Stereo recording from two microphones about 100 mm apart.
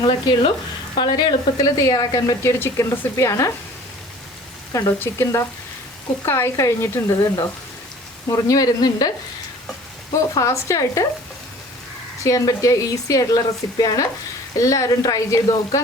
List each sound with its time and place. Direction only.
0.0 s speech: 50° left (ahead or behind)
2.4 s speech: 30° left (ahead or behind)
4.9 s speech: 25° left (ahead or behind)
12.2 s speech: 35° left (ahead or behind)